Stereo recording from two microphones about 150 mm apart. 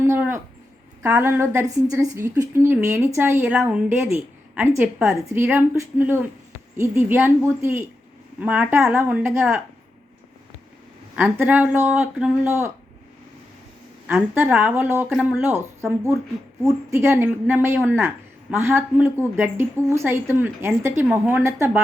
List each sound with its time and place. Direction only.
0.0 s a sound: 15° right (ahead or behind)
1.0 s a woman's voice: 15° right (ahead or behind)
11.1 s a woman's voice: 10° right (ahead or behind)
14.1 s a woman's voice: 15° right (ahead or behind)